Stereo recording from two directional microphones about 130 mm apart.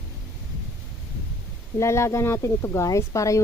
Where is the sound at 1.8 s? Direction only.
20° left (ahead or behind).